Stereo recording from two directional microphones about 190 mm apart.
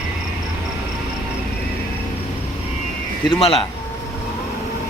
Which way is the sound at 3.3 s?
30° left (ahead or behind).